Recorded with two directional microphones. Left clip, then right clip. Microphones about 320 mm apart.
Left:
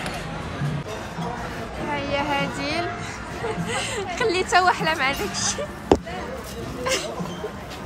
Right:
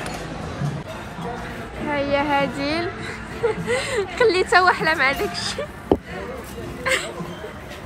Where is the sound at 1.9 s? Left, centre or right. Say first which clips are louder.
Right 4 dB; centre.